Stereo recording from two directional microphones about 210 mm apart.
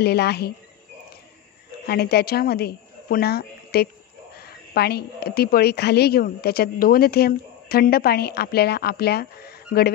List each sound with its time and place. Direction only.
0.0 s a woman's voice: 50° left (ahead or behind)
1.9 s a woman's voice: 50° left (ahead or behind)